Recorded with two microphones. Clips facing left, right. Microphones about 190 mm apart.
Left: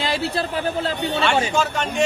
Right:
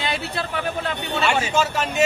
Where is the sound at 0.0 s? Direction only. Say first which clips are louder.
Left 4 dB; 30° left (ahead or behind).